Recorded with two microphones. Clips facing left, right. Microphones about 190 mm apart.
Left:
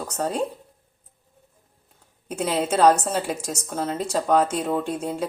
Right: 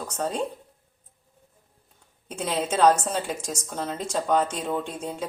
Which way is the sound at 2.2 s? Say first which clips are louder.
Left 4 dB; 5° left (ahead or behind).